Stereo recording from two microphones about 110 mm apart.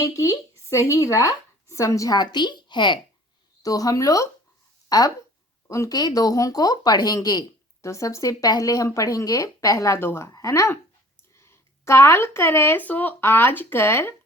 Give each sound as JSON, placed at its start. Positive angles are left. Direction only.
{"t": 0.0, "sound": "speech", "side_deg": 30}
{"t": 3.6, "sound": "speech", "side_deg": 35}